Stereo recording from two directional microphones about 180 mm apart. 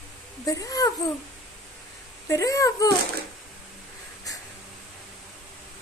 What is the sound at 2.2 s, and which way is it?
Speech, 20° left (ahead or behind).